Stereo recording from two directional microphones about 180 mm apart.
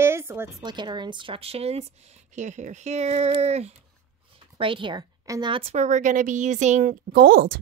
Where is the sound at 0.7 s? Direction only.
25° right (ahead or behind).